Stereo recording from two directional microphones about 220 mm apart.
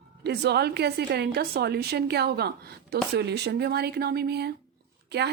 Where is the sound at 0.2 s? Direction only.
50° right (ahead or behind).